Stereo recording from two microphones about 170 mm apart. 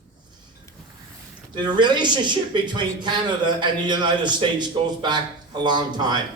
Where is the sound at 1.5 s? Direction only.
25° right (ahead or behind).